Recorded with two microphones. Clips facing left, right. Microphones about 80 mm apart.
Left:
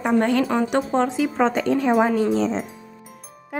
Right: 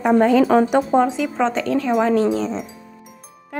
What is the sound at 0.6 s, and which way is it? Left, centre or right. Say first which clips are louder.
Speech: right 5 dB; centre.